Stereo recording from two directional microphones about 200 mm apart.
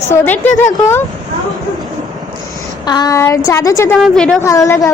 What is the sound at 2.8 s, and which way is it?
A woman's voice, 20° left (ahead or behind).